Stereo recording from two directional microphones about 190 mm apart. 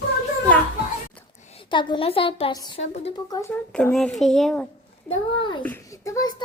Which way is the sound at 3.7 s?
5° left (ahead or behind).